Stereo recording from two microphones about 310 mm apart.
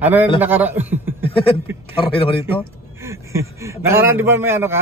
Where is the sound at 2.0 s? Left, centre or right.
Centre.